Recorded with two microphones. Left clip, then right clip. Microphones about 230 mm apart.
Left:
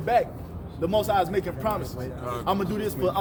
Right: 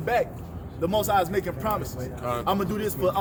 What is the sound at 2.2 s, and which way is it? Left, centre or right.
Speech, right.